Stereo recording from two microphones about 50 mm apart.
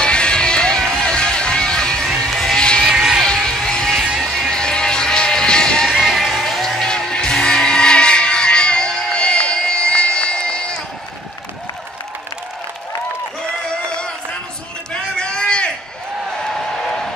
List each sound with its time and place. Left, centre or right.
0.0 s music: centre
2.8 s a sound: centre
3.3 s music: centre
4.2 s music: centre
4.5 s music: centre
5.9 s music: centre
13.8 s music: centre
14.9 s a sound: centre